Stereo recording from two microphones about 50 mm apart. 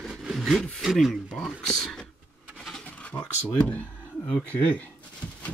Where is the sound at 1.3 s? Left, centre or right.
Centre.